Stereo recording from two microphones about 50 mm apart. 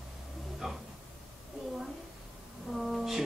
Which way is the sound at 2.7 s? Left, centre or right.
Centre.